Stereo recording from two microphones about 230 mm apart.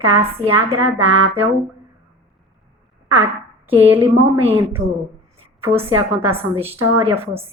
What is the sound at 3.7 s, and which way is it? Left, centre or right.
Speech, centre.